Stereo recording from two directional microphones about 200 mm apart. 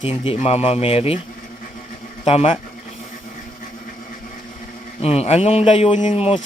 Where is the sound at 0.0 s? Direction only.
30° left (ahead or behind).